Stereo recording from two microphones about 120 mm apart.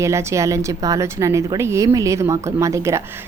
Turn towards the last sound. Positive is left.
turn(degrees=-25)  # may be behind; listen again after turning